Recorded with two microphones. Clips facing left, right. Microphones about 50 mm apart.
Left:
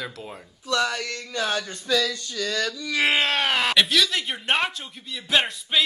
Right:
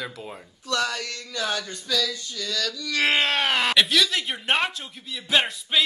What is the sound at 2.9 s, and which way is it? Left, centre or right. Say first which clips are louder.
Speech: even; centre.